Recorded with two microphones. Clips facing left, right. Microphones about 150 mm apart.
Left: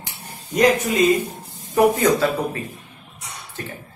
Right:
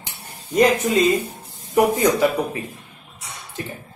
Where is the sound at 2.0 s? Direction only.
15° right (ahead or behind).